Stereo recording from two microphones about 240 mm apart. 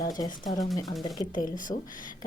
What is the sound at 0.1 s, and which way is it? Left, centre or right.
Speech, centre.